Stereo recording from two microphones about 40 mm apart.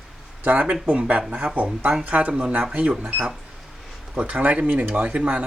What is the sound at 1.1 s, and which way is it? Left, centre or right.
Speech, right.